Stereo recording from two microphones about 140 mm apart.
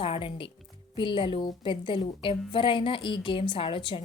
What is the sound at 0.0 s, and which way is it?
A woman's voice, 40° left (ahead or behind).